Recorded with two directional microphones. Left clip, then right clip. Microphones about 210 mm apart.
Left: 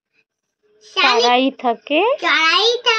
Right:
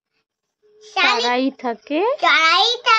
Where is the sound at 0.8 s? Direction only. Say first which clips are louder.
Left 3 dB; 5° right (ahead or behind).